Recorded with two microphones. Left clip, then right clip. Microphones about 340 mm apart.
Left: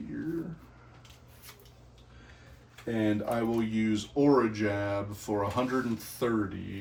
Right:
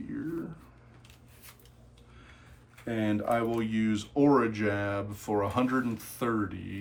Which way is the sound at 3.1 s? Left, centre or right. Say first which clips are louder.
Right 5 dB; right.